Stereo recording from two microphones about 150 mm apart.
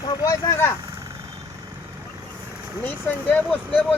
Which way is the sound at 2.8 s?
10° left (ahead or behind).